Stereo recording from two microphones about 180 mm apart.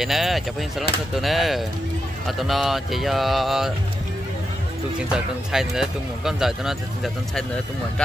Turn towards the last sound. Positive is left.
turn(degrees=0)  # may be behind; listen again after turning